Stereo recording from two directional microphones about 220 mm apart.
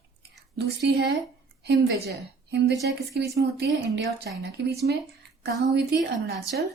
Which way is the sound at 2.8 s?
50° right (ahead or behind).